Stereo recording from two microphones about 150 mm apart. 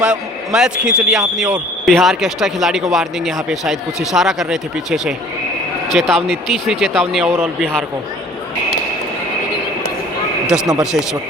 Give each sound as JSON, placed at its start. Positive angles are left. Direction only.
{"t": 0.0, "sound": "speech", "side_deg": -5}
{"t": 7.3, "sound": "speech", "side_deg": -15}
{"t": 10.5, "sound": "speech", "side_deg": -5}